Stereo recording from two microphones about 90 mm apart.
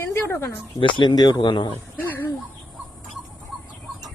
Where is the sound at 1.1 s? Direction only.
55° left (ahead or behind).